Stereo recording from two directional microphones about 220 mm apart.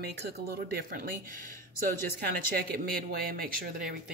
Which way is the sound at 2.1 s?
45° right (ahead or behind).